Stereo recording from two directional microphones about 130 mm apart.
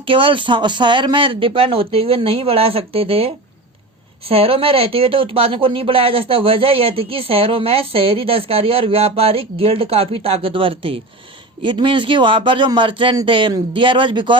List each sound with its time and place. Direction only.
0.0 s a man's voice: 40° right (ahead or behind)